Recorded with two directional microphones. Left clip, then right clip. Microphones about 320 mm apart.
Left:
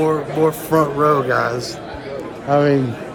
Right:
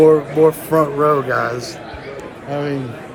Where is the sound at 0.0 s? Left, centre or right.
Centre.